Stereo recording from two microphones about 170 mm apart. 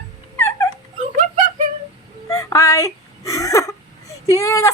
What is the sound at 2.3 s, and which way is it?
Whimper, 20° left (ahead or behind).